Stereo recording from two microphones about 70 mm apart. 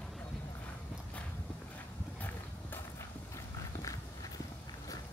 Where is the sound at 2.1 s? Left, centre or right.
Left.